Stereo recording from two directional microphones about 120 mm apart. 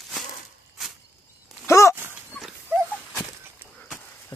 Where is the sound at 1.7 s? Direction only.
25° left (ahead or behind).